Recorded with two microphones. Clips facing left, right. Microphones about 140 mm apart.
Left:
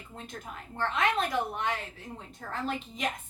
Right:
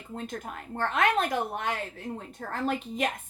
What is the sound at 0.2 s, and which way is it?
A woman's voice, 55° right (ahead or behind).